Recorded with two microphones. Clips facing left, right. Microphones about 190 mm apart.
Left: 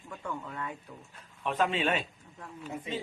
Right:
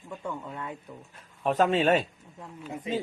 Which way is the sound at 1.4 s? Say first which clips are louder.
Right 6 dB; 40° right (ahead or behind).